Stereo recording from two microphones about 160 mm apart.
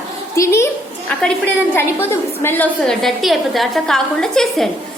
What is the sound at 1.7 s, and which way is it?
A woman's voice, 15° left (ahead or behind).